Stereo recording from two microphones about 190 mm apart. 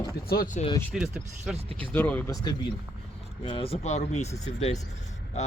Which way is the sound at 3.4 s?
25° left (ahead or behind).